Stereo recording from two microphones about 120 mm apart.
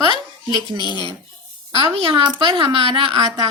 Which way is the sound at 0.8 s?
35° left (ahead or behind).